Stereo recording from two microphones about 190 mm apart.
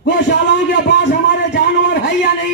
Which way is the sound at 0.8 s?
65° left (ahead or behind).